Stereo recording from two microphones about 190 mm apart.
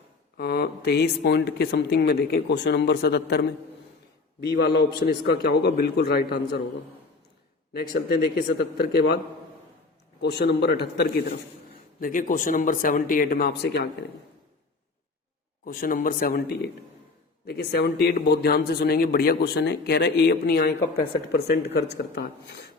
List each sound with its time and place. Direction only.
0.3 s speech: 55° left (ahead or behind)
7.7 s speech: 55° left (ahead or behind)
10.2 s speech: 60° left (ahead or behind)
11.9 s speech: 45° left (ahead or behind); by 13.8 s 60° left (ahead or behind)
15.6 s speech: 50° left (ahead or behind)